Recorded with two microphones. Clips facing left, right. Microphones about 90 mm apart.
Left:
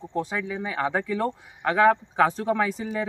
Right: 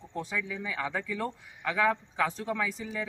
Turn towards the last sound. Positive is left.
turn(degrees=45)  # may be behind; listen again after turning